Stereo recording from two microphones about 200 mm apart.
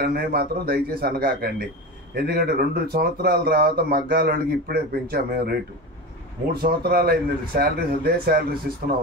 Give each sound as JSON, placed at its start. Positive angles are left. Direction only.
{"t": 0.0, "sound": "speech", "side_deg": -50}